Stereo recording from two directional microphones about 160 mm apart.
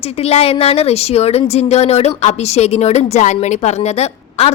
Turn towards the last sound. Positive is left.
turn(degrees=40)  # may be behind; listen again after turning